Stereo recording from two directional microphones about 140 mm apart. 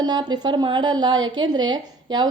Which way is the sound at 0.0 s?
30° right (ahead or behind).